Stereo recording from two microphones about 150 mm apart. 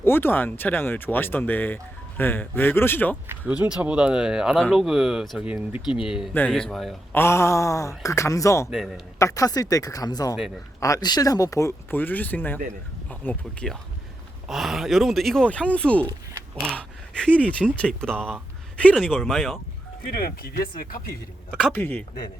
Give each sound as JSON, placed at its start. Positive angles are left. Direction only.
{"t": 0.0, "sound": "speech", "side_deg": 15}
{"t": 3.2, "sound": "speech", "side_deg": -10}
{"t": 7.1, "sound": "speech", "side_deg": 15}
{"t": 8.7, "sound": "speech", "side_deg": -5}
{"t": 9.1, "sound": "speech", "side_deg": 20}
{"t": 20.1, "sound": "speech", "side_deg": 80}
{"t": 21.7, "sound": "speech", "side_deg": 15}